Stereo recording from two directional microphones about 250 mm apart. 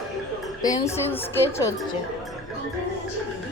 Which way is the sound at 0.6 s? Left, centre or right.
Centre.